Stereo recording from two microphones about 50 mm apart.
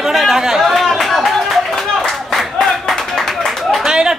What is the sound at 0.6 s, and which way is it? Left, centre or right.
Clapping, centre.